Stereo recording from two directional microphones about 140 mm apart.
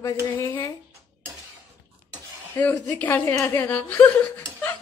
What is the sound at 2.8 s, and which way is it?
A woman's voice, 10° left (ahead or behind).